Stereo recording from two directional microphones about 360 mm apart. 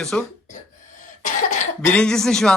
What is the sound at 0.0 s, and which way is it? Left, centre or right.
Speech, centre.